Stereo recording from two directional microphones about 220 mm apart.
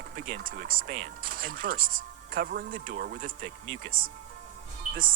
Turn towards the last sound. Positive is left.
turn(degrees=-40)  # may be behind; listen again after turning